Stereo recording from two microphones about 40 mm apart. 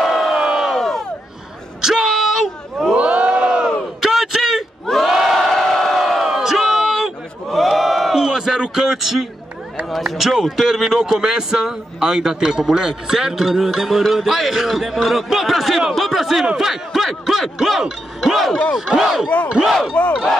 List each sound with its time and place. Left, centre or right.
0.0 s crowd: centre
0.3 s crowd: centre
0.7 s crowd: centre
1.8 s a sound: centre
2.9 s crowd: right
4.0 s a sound: centre
5.0 s crowd: centre
5.5 s crowd: centre
7.5 s a sound: centre
10.1 s a man's voice: centre